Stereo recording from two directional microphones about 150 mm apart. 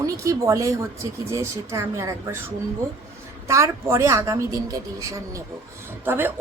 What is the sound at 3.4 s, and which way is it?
A woman's voice, 20° right (ahead or behind).